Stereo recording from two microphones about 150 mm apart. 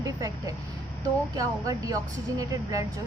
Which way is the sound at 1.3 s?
25° right (ahead or behind).